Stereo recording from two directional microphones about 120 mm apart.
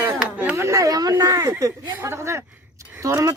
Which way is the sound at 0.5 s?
25° right (ahead or behind).